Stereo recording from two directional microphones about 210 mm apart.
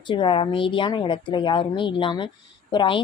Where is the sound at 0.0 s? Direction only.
20° left (ahead or behind).